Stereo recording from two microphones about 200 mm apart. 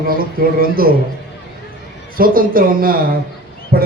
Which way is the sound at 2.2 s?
45° right (ahead or behind).